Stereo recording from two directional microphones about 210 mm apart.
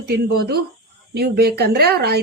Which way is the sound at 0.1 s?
50° right (ahead or behind).